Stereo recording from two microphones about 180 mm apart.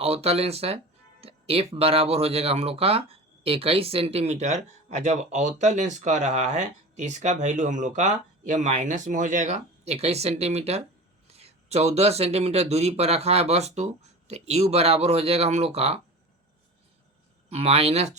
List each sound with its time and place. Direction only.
0.0 s speech: 35° right (ahead or behind)
17.5 s speech: 35° right (ahead or behind)